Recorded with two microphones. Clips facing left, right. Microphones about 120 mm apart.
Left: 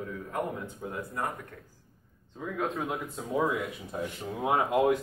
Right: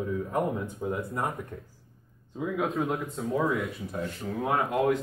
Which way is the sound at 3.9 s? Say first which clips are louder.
Right 1 dB; 20° left (ahead or behind).